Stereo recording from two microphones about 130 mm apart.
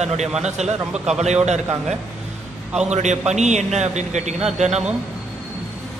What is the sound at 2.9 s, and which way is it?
A man's voice, 60° right (ahead or behind).